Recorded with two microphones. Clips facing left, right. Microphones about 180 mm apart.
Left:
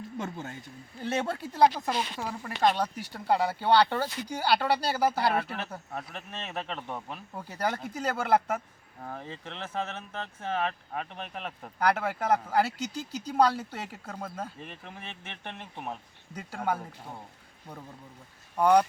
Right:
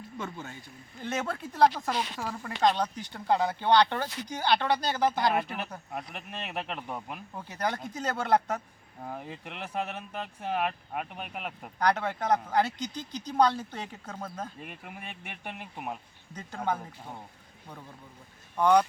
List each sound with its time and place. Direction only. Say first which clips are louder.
0.2 s speech: left 2 dB; 40° left (ahead or behind)
1.0 s speech: left 2 dB; 30° left (ahead or behind)
1.4 s speech: even; 10° left (ahead or behind)
5.9 s speech: even; 10° right (ahead or behind)
7.6 s speech: left 1 dB; 10° left (ahead or behind)
9.0 s speech: even; 10° right (ahead or behind)
11.8 s speech: even; 5° left (ahead or behind)
14.6 s speech: even; 10° right (ahead or behind)
16.3 s speech: left 1 dB; 5° left (ahead or behind)
18.5 s speech: left 1 dB; 10° left (ahead or behind)